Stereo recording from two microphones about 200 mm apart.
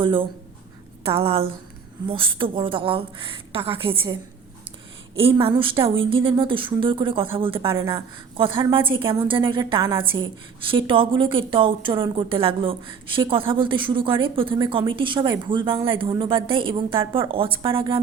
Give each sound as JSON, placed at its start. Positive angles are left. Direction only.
{"t": 0.0, "sound": "a woman's voice", "side_deg": -25}
{"t": 5.4, "sound": "a woman's voice", "side_deg": -25}